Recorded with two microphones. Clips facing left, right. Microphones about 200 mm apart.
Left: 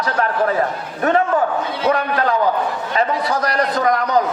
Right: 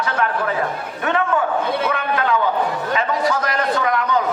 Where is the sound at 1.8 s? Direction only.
40° left (ahead or behind).